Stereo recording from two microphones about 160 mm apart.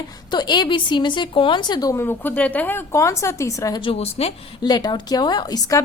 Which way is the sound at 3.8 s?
40° left (ahead or behind).